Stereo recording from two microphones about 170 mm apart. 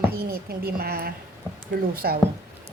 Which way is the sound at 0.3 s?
60° right (ahead or behind).